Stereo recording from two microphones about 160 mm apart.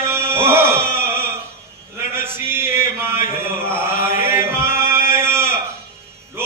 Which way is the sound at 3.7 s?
15° right (ahead or behind).